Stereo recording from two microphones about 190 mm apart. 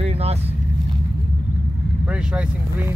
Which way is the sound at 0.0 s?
30° right (ahead or behind).